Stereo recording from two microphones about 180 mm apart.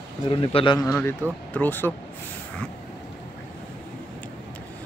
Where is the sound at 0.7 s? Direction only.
15° left (ahead or behind).